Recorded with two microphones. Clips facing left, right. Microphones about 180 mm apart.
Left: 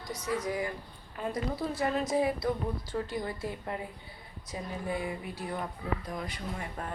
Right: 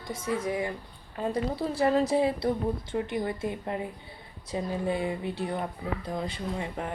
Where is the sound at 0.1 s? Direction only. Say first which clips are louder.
Right 3 dB; 25° right (ahead or behind).